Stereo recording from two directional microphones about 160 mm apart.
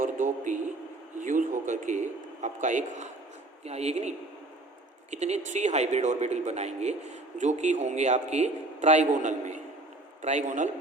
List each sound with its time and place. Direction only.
0.0 s a sound: 50° right (ahead or behind)
1.2 s a man's voice: 55° right (ahead or behind)
5.1 s speech: 45° right (ahead or behind)